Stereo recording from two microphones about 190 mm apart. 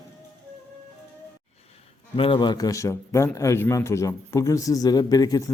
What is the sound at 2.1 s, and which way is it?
A man's voice, 25° left (ahead or behind).